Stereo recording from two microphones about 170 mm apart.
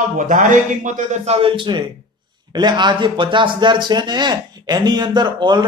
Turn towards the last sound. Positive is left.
turn(degrees=-25)  # may be behind; listen again after turning